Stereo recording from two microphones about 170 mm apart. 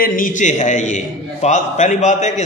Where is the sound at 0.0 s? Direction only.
55° left (ahead or behind).